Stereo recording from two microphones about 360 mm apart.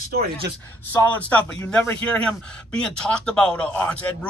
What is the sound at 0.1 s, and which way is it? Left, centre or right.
Speech, right.